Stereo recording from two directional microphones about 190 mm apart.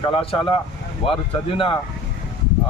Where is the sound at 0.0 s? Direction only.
30° left (ahead or behind).